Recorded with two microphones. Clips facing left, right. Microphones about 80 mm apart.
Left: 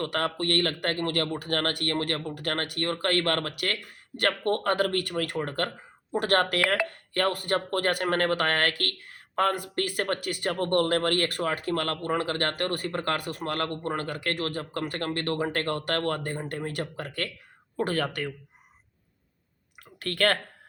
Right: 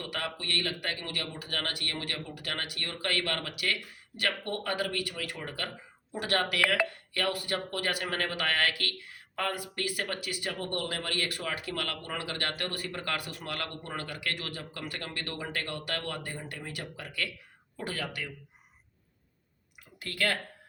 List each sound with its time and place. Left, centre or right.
0.0 s speech: left
20.0 s speech: left